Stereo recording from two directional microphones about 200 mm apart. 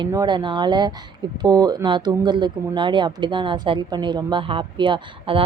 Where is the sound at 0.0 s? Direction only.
20° right (ahead or behind).